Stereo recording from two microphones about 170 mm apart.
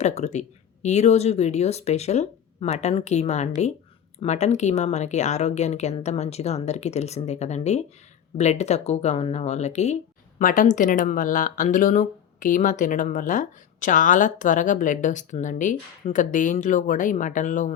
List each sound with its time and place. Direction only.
0.0 s speech: 40° left (ahead or behind)